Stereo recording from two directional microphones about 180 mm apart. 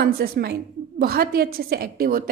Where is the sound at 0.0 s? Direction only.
65° right (ahead or behind).